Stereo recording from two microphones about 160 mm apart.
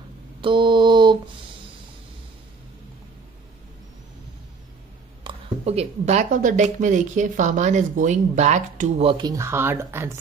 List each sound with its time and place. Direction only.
0.4 s a sound: 30° right (ahead or behind)
5.2 s a woman's voice: 40° right (ahead or behind)
9.0 s speech: 30° right (ahead or behind)